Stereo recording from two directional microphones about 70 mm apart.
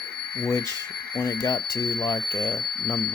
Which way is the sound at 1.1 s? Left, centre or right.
Left.